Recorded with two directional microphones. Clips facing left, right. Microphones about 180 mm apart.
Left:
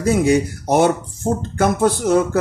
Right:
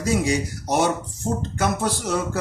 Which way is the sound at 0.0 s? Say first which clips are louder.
Left 7 dB; 55° left (ahead or behind).